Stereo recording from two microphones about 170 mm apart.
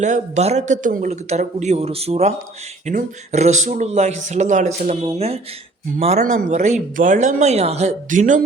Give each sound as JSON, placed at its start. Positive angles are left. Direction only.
{"t": 0.0, "sound": "a man's voice", "side_deg": -45}
{"t": 6.5, "sound": "a man's voice", "side_deg": -40}